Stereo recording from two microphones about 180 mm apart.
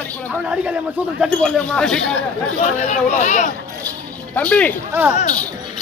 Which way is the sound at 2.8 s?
40° left (ahead or behind).